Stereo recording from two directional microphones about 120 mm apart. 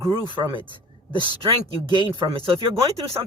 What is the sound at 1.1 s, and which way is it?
Speech, 45° right (ahead or behind).